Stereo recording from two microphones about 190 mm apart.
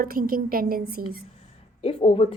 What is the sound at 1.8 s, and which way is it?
Speech, 30° left (ahead or behind).